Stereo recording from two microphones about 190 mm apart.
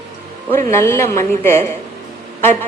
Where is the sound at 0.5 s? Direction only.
15° left (ahead or behind).